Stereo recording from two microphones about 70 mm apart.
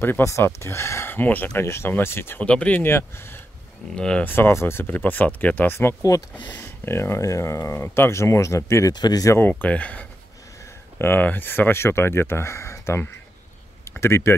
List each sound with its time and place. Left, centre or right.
0.4 s speech: left
1.1 s speech: left
2.4 s speech: centre
2.8 s speech: left
3.9 s speech: centre
4.2 s speech: left
6.0 s speech: left
6.5 s speech: left
8.9 s speech: left
9.4 s speech: left
11.0 s speech: left